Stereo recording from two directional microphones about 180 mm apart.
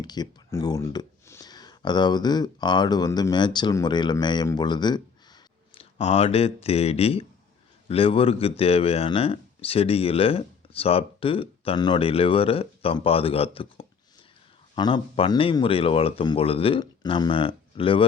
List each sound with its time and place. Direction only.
0.0 s speech: 25° left (ahead or behind)
6.0 s speech: 35° left (ahead or behind)